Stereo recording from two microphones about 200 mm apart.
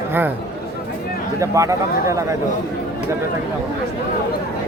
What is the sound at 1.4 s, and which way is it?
Speech, 15° right (ahead or behind).